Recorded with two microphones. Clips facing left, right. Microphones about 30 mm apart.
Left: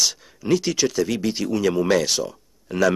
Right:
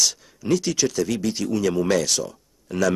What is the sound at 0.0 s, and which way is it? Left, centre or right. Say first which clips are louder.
Speech: even; centre.